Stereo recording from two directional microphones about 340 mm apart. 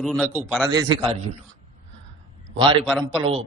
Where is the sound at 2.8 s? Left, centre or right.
Centre.